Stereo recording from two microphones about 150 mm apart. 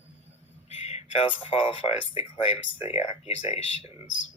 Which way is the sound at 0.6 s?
45° left (ahead or behind).